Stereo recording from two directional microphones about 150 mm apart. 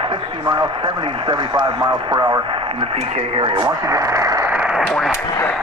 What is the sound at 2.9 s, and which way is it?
Speech, 35° right (ahead or behind).